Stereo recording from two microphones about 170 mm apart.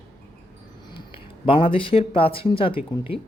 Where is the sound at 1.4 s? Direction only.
30° left (ahead or behind).